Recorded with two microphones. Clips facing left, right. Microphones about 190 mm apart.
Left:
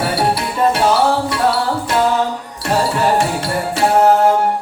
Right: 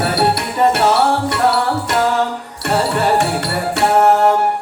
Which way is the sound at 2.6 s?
65° right (ahead or behind).